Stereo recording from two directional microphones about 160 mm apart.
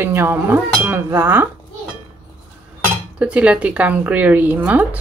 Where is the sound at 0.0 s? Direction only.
15° right (ahead or behind).